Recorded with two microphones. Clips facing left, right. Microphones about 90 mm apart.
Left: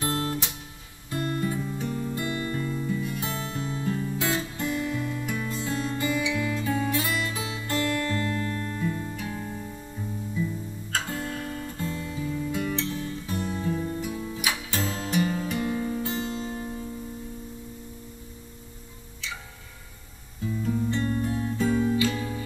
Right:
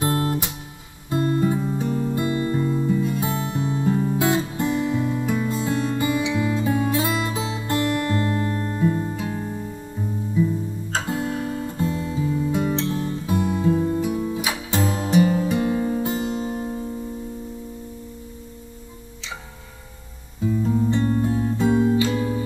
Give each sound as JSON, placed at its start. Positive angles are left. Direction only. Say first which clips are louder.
{"t": 0.0, "sound": "guitar", "louder": "right 5 dB", "side_deg": -25}
{"t": 1.1, "sound": "music", "louder": "right 7 dB", "side_deg": -25}
{"t": 10.3, "sound": "guitar", "louder": "right 10 dB", "side_deg": -25}
{"t": 13.5, "sound": "music", "louder": "right 9 dB", "side_deg": -20}
{"t": 20.4, "sound": "music", "louder": "right 6 dB", "side_deg": -30}